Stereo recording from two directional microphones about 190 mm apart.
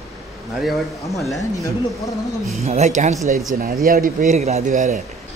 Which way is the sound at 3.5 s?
50° right (ahead or behind).